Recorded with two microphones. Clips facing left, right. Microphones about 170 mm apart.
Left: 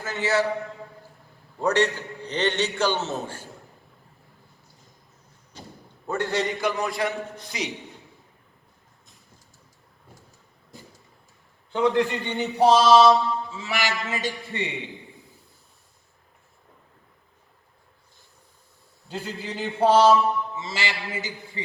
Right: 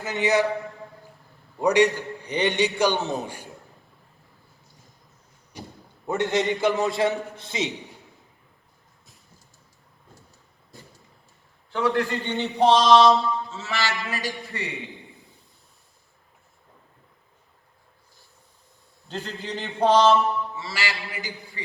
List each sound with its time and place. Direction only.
0.0 s a man's voice: 15° right (ahead or behind)
1.5 s a man's voice: 10° right (ahead or behind)
5.5 s a sound: 10° right (ahead or behind)
6.1 s a man's voice: 20° right (ahead or behind)
11.7 s a man's voice: 20° left (ahead or behind)
19.0 s a man's voice: 10° left (ahead or behind)
20.6 s a man's voice: 20° left (ahead or behind)